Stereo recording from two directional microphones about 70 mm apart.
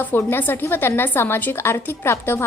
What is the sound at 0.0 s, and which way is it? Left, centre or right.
A woman's voice, left.